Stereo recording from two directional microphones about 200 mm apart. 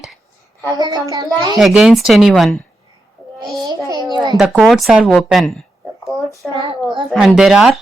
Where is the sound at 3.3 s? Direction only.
15° right (ahead or behind).